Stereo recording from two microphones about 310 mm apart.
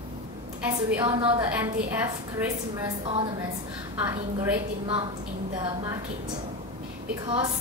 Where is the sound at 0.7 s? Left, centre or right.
Centre.